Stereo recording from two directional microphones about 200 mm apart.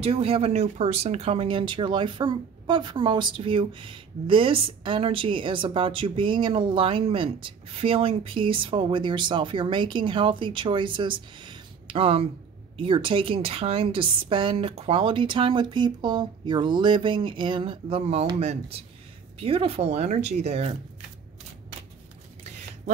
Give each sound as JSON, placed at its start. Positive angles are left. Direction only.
{"t": 0.0, "sound": "speech", "side_deg": -30}